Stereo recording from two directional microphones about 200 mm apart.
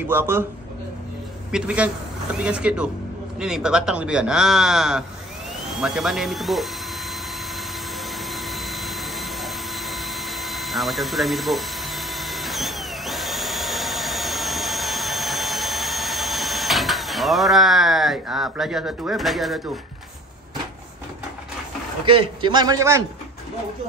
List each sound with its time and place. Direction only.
0.0 s a man's voice: 10° right (ahead or behind)
1.5 s speech: 5° right (ahead or behind)
8.3 s jet engine: centre (ahead or behind)
22.0 s a man's voice: 25° right (ahead or behind)